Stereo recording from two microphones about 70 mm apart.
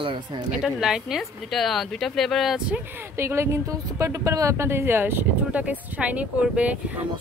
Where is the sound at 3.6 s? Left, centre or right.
Right.